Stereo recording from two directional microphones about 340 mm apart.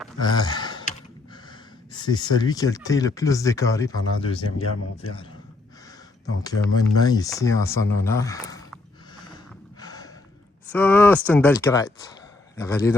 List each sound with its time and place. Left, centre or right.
0.2 s a sound: centre
1.9 s speech: centre
4.5 s speech: left
6.4 s speech: centre
8.0 s a sound: centre
9.8 s gasp: centre
10.7 s speech: centre